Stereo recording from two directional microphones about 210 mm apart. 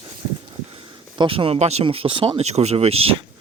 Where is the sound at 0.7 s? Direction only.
25° right (ahead or behind).